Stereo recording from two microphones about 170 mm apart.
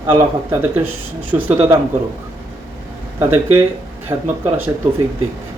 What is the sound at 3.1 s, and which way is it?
Speech, 10° right (ahead or behind).